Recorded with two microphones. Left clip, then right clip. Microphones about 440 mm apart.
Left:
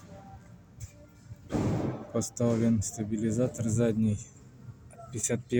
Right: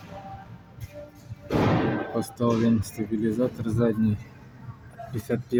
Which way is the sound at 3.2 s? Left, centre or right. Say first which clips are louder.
Right 3 dB; left.